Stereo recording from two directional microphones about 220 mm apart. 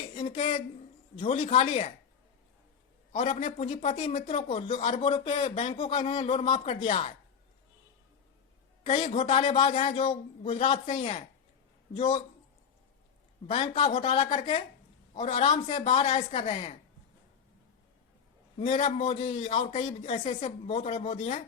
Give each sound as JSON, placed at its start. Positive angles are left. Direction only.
{"t": 0.1, "sound": "speech", "side_deg": 25}
{"t": 3.2, "sound": "speech", "side_deg": 30}
{"t": 8.8, "sound": "speech", "side_deg": 30}
{"t": 13.5, "sound": "speech", "side_deg": 25}
{"t": 18.8, "sound": "speech", "side_deg": 30}